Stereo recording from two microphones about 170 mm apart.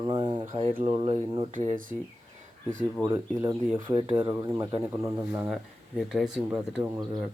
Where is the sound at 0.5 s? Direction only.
35° right (ahead or behind); by 2.0 s 50° right (ahead or behind).